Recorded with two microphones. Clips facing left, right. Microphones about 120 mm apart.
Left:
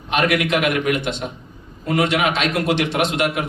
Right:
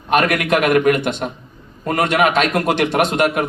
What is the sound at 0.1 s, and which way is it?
A man's voice, 50° right (ahead or behind).